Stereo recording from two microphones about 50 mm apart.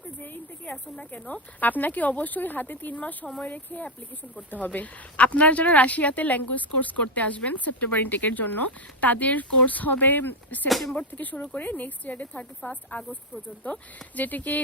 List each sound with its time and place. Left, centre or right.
0.2 s a woman's voice: left
10.7 s speech: centre
10.9 s a woman's voice: left